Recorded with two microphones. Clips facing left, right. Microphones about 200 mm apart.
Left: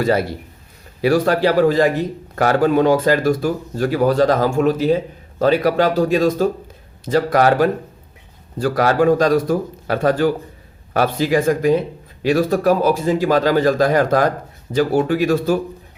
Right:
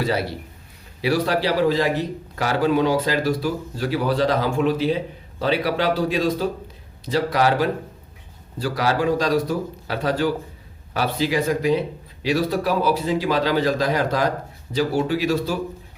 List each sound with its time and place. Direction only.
0.0 s a man's voice: 50° left (ahead or behind)